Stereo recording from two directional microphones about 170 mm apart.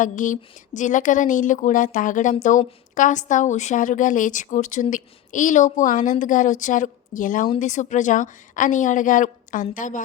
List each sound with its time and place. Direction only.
0.0 s a woman's voice: 50° left (ahead or behind)